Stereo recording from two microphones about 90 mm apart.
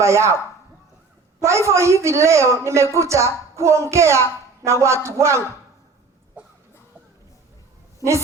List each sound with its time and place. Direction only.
0.0 s a woman's voice: 30° right (ahead or behind)
1.4 s a woman's voice: 30° right (ahead or behind)